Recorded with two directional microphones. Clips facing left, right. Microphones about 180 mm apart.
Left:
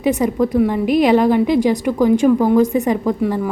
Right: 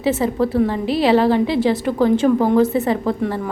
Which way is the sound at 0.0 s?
15° left (ahead or behind).